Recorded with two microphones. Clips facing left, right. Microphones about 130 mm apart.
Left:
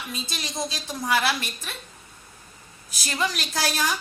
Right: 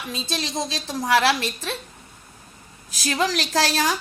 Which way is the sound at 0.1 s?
90° right.